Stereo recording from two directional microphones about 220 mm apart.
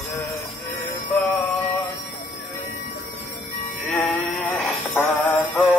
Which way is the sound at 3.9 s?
5° left (ahead or behind).